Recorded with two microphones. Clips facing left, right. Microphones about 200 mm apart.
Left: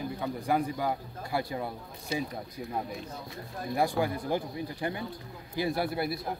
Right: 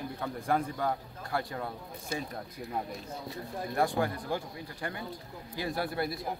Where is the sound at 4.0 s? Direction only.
15° left (ahead or behind).